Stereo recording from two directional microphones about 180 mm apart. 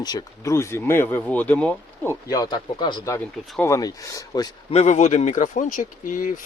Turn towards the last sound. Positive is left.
turn(degrees=45)  # may be behind; listen again after turning